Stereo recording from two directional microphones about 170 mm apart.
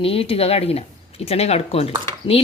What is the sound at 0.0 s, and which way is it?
Speech, 35° left (ahead or behind).